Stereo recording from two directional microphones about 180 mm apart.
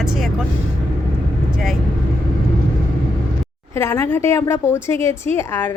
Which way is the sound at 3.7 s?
15° left (ahead or behind).